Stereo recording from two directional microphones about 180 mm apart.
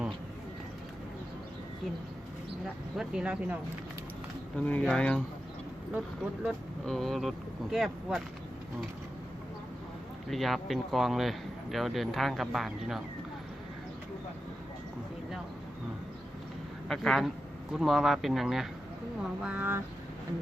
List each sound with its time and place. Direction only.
3.0 s speech: 5° right (ahead or behind)
4.5 s speech: 10° left (ahead or behind)
6.4 s speech: centre (ahead or behind)
10.2 s speech: centre (ahead or behind)
16.9 s speech: centre (ahead or behind)